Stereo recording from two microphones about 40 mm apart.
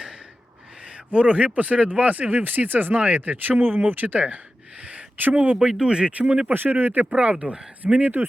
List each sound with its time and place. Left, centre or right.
0.9 s a sound: right
1.5 s speech: right
5.8 s speech: right
6.5 s speech: right
7.1 s speech: right
8.0 s speech: right